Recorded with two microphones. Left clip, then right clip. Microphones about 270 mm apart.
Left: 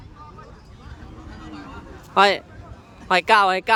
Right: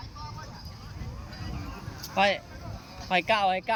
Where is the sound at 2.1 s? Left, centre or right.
Centre.